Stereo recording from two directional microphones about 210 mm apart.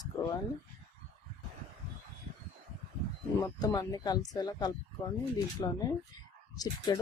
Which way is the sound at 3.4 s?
20° left (ahead or behind).